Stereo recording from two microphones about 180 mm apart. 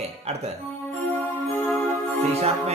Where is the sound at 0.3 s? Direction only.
35° right (ahead or behind).